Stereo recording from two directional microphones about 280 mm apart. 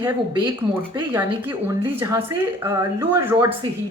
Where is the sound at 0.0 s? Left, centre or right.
Centre.